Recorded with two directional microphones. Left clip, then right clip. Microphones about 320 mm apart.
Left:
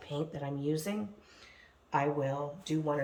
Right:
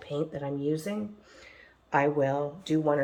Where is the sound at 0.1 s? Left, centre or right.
Centre.